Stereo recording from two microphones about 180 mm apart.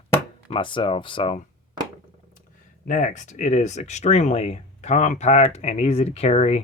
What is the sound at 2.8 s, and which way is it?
Speech, 45° left (ahead or behind).